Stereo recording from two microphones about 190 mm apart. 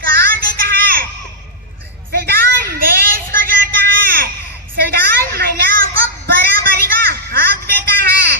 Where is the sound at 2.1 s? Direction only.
50° right (ahead or behind).